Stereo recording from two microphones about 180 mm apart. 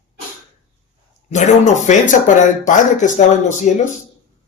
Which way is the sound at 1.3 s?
40° left (ahead or behind).